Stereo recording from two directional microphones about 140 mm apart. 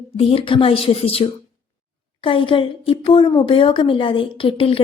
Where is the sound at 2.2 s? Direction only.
35° left (ahead or behind).